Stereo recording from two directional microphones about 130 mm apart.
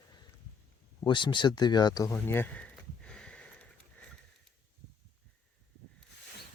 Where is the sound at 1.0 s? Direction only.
40° left (ahead or behind); by 3.7 s 10° left (ahead or behind).